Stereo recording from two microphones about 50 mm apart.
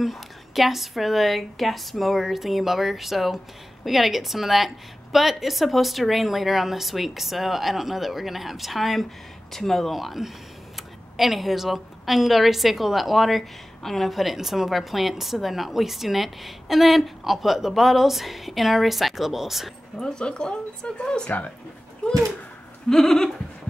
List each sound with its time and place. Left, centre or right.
0.0 s a woman's voice: centre
20.0 s speech: centre
22.0 s goat: centre